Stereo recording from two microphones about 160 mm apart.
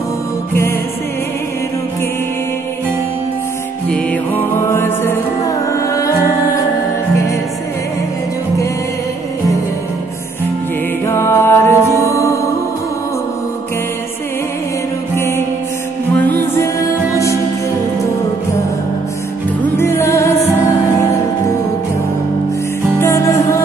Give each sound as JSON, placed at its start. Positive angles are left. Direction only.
{"t": 3.9, "sound": "music", "side_deg": 10}
{"t": 11.1, "sound": "music", "side_deg": 15}
{"t": 15.1, "sound": "music", "side_deg": 15}
{"t": 19.8, "sound": "music", "side_deg": 15}
{"t": 22.9, "sound": "music", "side_deg": 15}